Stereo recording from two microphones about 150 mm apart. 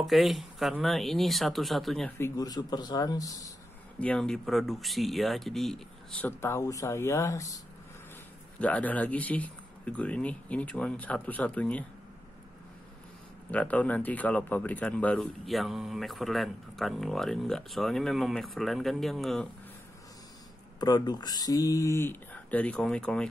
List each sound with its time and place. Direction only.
0.0 s speech: centre (ahead or behind)
2.1 s speech: 20° left (ahead or behind)
4.0 s speech: 5° left (ahead or behind)
6.2 s speech: 15° left (ahead or behind)
8.5 s speech: 10° left (ahead or behind)
13.5 s speech: 10° left (ahead or behind)
20.8 s speech: 25° left (ahead or behind); by 23.2 s 5° left (ahead or behind)